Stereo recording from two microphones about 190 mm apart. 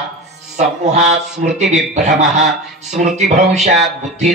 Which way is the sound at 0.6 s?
40° right (ahead or behind).